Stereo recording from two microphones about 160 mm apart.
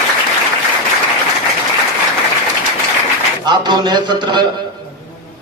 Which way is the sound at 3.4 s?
25° right (ahead or behind).